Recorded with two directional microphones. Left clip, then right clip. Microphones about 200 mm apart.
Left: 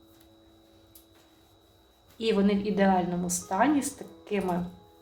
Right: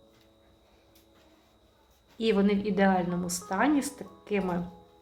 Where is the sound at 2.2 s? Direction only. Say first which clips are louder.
Even; 25° right (ahead or behind).